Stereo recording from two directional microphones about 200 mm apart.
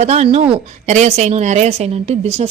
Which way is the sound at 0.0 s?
35° right (ahead or behind).